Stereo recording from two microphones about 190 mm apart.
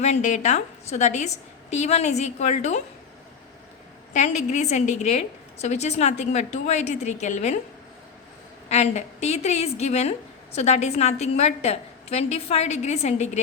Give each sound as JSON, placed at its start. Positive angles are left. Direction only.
{"t": 0.0, "sound": "a woman's voice", "side_deg": 40}
{"t": 4.1, "sound": "a woman's voice", "side_deg": 40}
{"t": 8.7, "sound": "a woman's voice", "side_deg": 35}